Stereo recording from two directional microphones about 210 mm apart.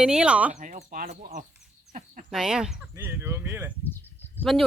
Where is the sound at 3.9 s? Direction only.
10° left (ahead or behind).